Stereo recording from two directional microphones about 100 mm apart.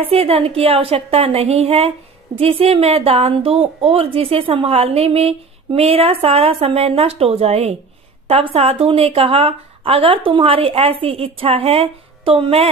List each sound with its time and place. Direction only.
0.0 s a woman's voice: 70° right (ahead or behind); by 1.9 s 90° right
2.3 s a woman's voice: 70° right (ahead or behind); by 7.7 s 90° right
8.3 s a woman's voice: 75° right (ahead or behind)